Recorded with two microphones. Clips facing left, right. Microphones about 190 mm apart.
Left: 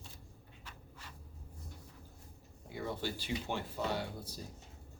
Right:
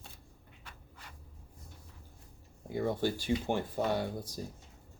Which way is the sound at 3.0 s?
50° right (ahead or behind).